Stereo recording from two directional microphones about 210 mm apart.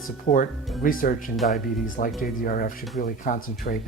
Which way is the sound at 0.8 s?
40° left (ahead or behind).